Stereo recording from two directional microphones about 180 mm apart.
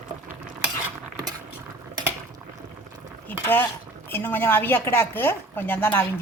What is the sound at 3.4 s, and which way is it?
Speech, 10° left (ahead or behind).